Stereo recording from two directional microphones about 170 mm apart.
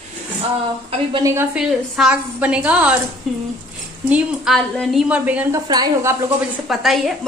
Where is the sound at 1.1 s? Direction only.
20° right (ahead or behind).